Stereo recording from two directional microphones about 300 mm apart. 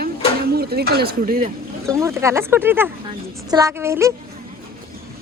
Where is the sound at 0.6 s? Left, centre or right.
Right.